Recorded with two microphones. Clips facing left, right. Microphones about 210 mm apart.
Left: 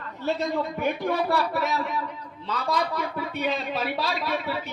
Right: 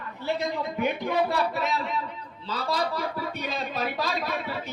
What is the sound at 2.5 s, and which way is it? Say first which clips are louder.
A man's voice: left 1 dB; 35° right (ahead or behind).